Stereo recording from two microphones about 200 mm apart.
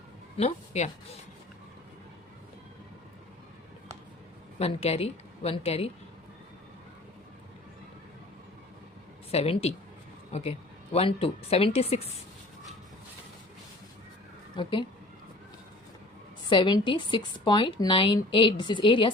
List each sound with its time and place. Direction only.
0.3 s speech: 35° left (ahead or behind)
4.6 s a woman's voice: 30° left (ahead or behind)
9.3 s a woman's voice: 30° left (ahead or behind)
14.5 s a woman's voice: 25° left (ahead or behind)
16.5 s a woman's voice: 25° left (ahead or behind)